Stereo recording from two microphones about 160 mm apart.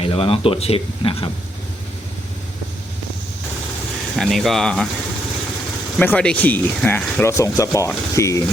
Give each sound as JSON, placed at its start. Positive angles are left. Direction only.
{"t": 0.0, "sound": "speech", "side_deg": 35}
{"t": 4.2, "sound": "speech", "side_deg": 0}
{"t": 6.0, "sound": "speech", "side_deg": 10}